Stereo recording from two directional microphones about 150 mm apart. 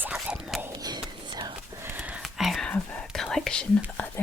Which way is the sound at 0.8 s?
25° right (ahead or behind).